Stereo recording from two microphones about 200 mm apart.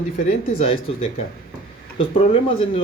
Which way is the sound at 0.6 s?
30° left (ahead or behind).